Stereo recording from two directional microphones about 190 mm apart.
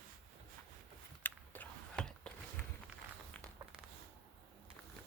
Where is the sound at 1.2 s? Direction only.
5° left (ahead or behind).